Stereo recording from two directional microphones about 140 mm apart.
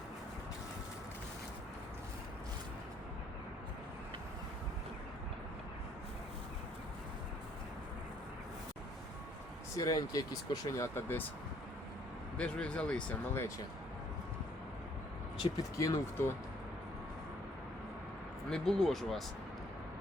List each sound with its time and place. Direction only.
9.7 s speech: 25° left (ahead or behind)
12.4 s speech: 5° left (ahead or behind)
15.4 s speech: 25° left (ahead or behind)
18.5 s speech: 5° left (ahead or behind)